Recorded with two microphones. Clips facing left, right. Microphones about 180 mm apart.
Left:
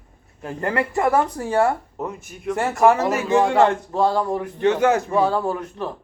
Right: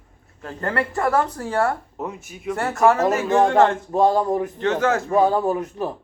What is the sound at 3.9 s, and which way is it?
Speech, 20° right (ahead or behind).